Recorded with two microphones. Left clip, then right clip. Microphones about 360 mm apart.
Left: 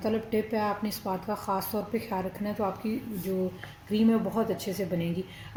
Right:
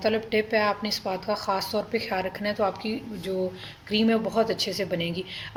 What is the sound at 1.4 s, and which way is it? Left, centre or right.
A woman's voice, right.